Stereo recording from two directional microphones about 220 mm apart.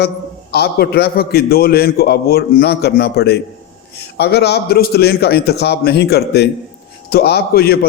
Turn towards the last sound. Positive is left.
turn(degrees=45)  # may be behind; listen again after turning